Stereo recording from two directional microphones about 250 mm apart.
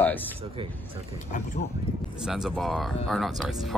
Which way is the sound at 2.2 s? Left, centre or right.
Centre.